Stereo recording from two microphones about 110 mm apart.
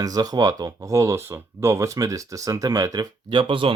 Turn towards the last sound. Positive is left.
turn(degrees=-50)  # may be behind; listen again after turning